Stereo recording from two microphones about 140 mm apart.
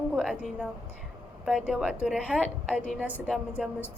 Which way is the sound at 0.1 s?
5° right (ahead or behind).